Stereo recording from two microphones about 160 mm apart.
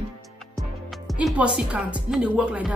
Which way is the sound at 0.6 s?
Centre (ahead or behind).